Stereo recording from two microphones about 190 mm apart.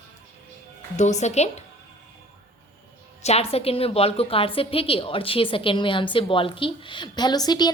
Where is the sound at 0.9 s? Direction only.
40° left (ahead or behind).